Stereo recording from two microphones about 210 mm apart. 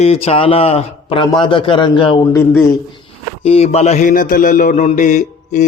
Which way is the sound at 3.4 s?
30° left (ahead or behind).